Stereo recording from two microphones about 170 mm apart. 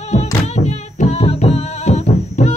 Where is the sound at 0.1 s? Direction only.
45° left (ahead or behind).